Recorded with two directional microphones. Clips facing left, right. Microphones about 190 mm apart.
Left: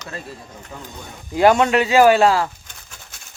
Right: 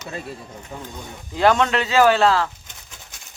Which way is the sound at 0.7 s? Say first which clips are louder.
Right 2 dB; 20° right (ahead or behind).